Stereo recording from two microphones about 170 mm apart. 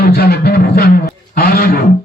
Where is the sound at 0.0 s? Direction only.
65° left (ahead or behind).